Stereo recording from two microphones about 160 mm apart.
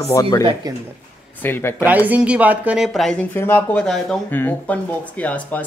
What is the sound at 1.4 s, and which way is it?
Speech, 15° left (ahead or behind).